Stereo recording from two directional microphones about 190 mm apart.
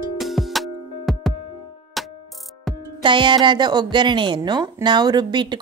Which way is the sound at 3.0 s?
25° right (ahead or behind).